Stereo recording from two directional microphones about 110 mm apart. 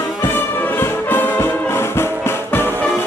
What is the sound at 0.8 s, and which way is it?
Music, 20° left (ahead or behind).